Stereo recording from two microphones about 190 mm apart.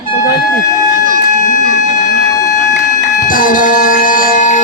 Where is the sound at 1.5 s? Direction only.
40° left (ahead or behind).